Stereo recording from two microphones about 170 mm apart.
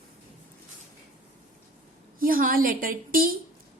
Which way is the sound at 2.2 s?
55° right (ahead or behind).